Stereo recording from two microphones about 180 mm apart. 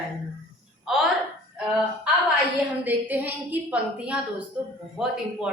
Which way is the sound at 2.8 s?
10° right (ahead or behind).